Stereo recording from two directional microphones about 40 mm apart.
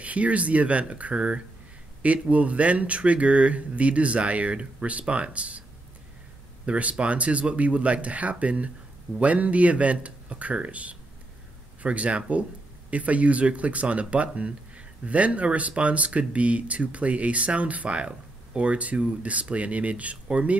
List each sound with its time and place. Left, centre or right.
0.0 s speech: right
6.6 s speech: right